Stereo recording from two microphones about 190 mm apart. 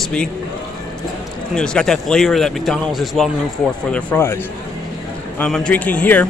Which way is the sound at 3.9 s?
10° left (ahead or behind).